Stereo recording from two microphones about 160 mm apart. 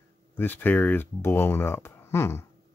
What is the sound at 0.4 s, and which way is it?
Speech, 10° left (ahead or behind).